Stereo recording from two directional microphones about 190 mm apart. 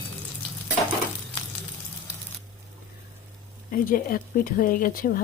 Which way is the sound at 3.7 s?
50° left (ahead or behind).